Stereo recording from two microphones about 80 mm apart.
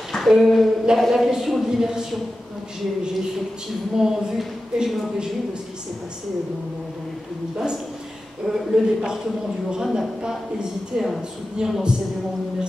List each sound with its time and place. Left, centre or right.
0.1 s a woman's voice: centre
4.0 s a woman's voice: centre
7.5 s a woman's voice: centre